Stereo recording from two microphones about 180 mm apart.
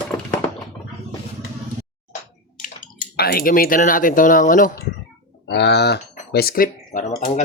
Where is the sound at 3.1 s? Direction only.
60° left (ahead or behind).